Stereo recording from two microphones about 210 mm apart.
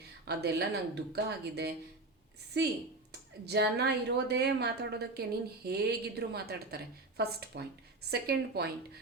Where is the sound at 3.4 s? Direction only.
50° right (ahead or behind).